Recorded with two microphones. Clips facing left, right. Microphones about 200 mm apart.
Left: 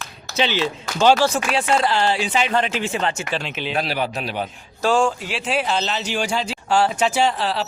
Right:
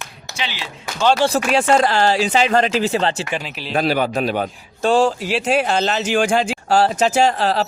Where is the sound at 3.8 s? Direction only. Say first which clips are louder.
Right 7 dB; 45° right (ahead or behind).